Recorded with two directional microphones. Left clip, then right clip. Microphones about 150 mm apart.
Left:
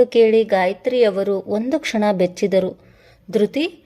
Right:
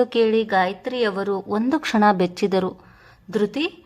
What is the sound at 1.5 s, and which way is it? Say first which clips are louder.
Speech: left 2 dB; 20° left (ahead or behind).